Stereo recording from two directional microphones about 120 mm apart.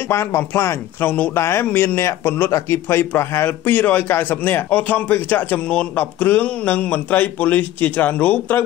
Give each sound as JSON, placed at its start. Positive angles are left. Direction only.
{"t": 0.1, "sound": "speech", "side_deg": 20}